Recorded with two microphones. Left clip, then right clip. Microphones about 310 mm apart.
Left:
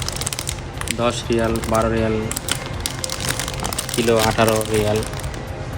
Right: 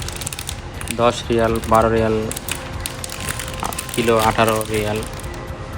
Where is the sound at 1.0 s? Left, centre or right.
Centre.